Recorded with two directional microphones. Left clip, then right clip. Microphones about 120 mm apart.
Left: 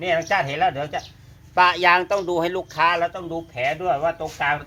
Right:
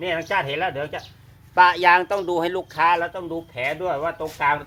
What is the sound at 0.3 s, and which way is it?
Speech, 20° right (ahead or behind).